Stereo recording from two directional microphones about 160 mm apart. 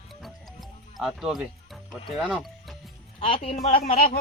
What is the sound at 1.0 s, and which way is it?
Speech, centre (ahead or behind).